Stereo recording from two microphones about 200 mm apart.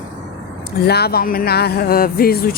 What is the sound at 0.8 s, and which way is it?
Speech, 55° left (ahead or behind).